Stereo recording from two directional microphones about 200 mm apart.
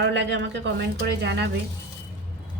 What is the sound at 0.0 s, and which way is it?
A woman's voice, 60° right (ahead or behind).